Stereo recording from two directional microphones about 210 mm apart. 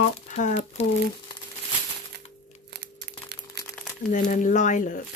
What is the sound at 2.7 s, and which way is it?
Crumpling, 50° right (ahead or behind).